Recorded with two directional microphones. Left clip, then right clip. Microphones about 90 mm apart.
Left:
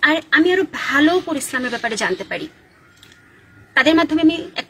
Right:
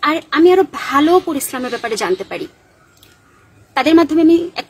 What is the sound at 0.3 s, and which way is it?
A woman's voice, 35° right (ahead or behind).